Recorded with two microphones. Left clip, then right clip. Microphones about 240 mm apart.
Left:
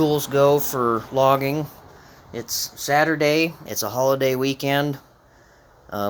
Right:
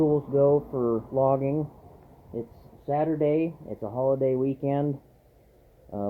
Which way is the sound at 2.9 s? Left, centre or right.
Left.